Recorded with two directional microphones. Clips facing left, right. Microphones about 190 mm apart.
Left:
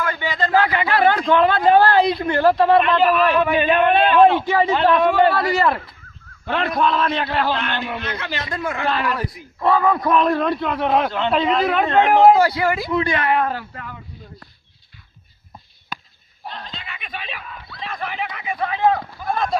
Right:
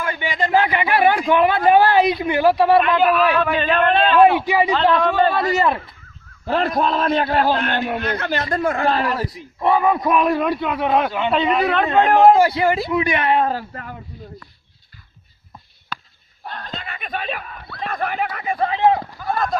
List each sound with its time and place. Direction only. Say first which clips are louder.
0.0 s speech: even; 15° right (ahead or behind); by 4.2 s 10° left (ahead or behind)
4.2 s speech: right 1 dB; 10° right (ahead or behind)
4.7 s a man's voice: left 3 dB; 15° left (ahead or behind)
5.3 s speech: even; 20° right (ahead or behind)
6.4 s a man's voice: right 1 dB; 35° right (ahead or behind)
9.4 s a man's voice: even; 20° right (ahead or behind); by 12.4 s 10° left (ahead or behind)
12.4 s speech: right 2 dB; 25° right (ahead or behind)
12.9 s speech: right 1 dB; 15° right (ahead or behind); by 13.9 s 40° right (ahead or behind)
16.6 s speech: right 5 dB; 50° right (ahead or behind); by 19.0 s 25° right (ahead or behind)